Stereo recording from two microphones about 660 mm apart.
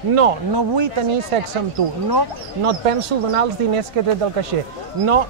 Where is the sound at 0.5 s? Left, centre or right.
Right.